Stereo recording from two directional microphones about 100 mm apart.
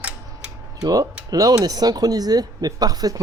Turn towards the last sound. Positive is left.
turn(degrees=-40)  # may be behind; listen again after turning